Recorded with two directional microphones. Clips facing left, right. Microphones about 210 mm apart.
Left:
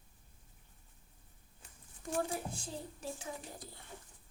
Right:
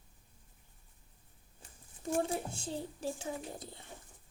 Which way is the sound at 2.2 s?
25° right (ahead or behind).